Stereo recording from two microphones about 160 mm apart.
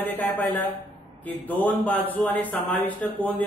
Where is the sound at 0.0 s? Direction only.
10° left (ahead or behind).